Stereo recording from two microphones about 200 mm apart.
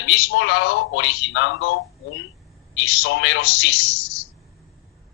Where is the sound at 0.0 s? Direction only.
70° left (ahead or behind).